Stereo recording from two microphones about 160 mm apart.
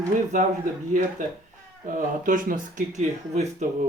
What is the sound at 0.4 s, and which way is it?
Speech, 55° right (ahead or behind).